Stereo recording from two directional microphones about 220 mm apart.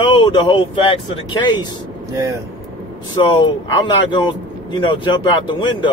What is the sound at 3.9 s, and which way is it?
Speech, 20° left (ahead or behind).